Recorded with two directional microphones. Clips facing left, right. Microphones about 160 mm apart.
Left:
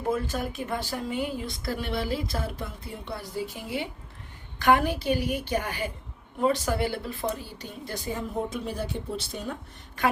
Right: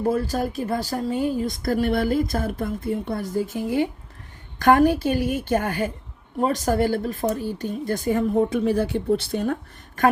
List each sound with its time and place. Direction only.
0.1 s speech: 35° right (ahead or behind)